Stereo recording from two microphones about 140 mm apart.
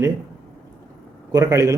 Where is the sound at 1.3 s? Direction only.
25° right (ahead or behind).